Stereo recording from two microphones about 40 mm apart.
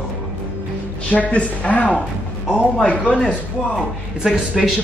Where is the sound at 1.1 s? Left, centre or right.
Left.